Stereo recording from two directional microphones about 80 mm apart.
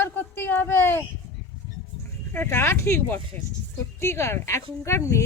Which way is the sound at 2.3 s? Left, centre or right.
Left.